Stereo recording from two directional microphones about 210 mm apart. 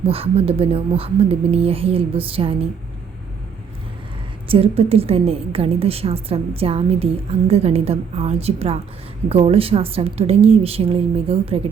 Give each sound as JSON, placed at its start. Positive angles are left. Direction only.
{"t": 0.0, "sound": "a woman's voice", "side_deg": -25}
{"t": 4.4, "sound": "a woman's voice", "side_deg": -25}